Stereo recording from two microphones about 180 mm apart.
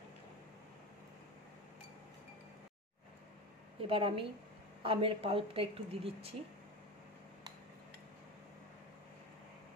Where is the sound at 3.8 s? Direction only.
30° right (ahead or behind).